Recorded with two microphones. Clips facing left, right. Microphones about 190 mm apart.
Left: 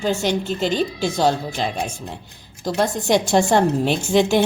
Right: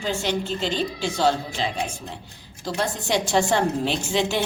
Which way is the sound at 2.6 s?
45° left (ahead or behind).